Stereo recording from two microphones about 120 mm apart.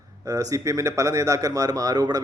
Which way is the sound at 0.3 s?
30° right (ahead or behind).